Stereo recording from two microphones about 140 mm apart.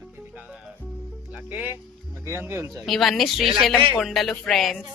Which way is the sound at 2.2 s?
20° right (ahead or behind).